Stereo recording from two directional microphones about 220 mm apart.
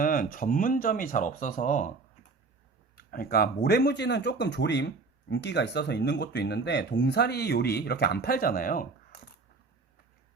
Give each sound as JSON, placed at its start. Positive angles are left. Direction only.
{"t": 0.0, "sound": "speech", "side_deg": 40}
{"t": 2.9, "sound": "speech", "side_deg": 45}